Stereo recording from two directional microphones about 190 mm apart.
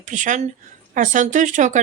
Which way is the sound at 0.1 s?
40° right (ahead or behind).